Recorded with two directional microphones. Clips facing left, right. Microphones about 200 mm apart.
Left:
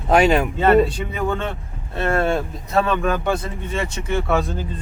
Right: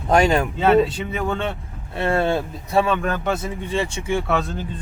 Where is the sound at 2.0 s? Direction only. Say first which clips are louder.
Even; 15° right (ahead or behind).